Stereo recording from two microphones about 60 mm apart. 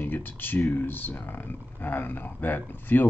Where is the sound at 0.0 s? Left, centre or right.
Left.